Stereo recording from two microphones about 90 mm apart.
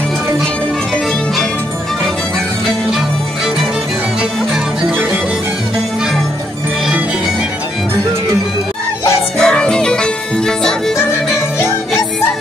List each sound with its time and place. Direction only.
9.4 s music: 5° left (ahead or behind)
11.6 s music: 30° left (ahead or behind)